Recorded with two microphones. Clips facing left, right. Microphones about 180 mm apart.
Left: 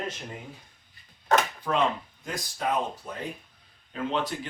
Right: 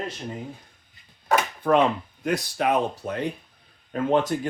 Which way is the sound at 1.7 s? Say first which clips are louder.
Right 11 dB; 60° right (ahead or behind).